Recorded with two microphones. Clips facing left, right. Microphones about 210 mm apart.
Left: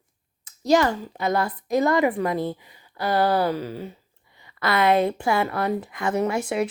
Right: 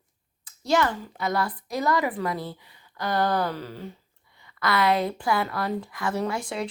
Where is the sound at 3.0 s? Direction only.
10° left (ahead or behind).